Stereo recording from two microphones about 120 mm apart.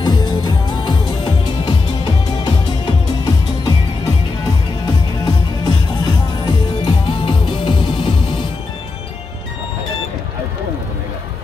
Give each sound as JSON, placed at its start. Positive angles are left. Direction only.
{"t": 0.0, "sound": "music", "side_deg": 35}
{"t": 4.8, "sound": "music", "side_deg": 35}